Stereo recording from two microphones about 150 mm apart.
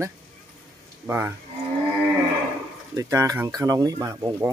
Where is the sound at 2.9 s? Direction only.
20° right (ahead or behind).